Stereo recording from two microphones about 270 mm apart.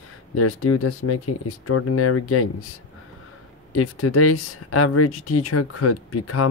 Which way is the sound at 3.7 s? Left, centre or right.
Left.